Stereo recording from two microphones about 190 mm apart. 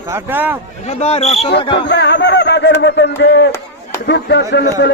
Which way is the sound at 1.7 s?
65° left (ahead or behind).